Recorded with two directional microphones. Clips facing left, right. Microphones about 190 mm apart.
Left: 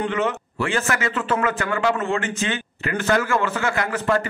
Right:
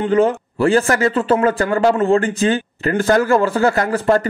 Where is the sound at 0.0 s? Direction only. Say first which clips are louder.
Right 8 dB; 35° right (ahead or behind).